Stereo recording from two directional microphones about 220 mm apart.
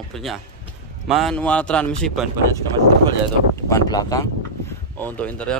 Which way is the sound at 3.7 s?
15° left (ahead or behind).